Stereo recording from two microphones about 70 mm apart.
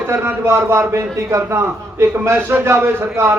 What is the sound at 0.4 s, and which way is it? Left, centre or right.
A man's voice, right.